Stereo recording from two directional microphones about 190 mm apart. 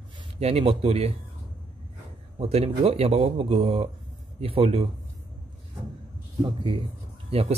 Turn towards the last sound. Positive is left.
turn(degrees=-30)  # may be behind; listen again after turning